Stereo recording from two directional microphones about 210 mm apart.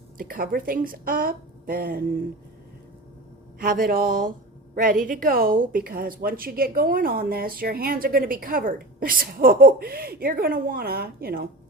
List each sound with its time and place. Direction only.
0.2 s a woman's voice: 40° right (ahead or behind)
3.6 s a sound: 40° right (ahead or behind)
4.7 s a woman's voice: 40° right (ahead or behind)